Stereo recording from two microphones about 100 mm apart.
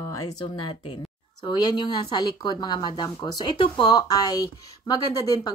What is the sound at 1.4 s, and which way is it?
Speech, 45° left (ahead or behind).